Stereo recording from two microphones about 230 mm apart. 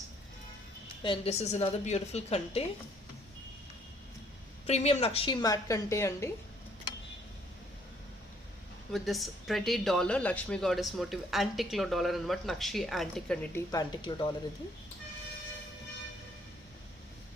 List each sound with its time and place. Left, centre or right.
1.0 s a woman's voice: left
4.6 s a woman's voice: left; by 6.3 s centre
8.9 s a woman's voice: centre